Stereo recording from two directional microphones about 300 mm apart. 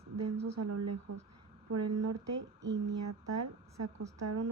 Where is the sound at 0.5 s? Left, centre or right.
Right.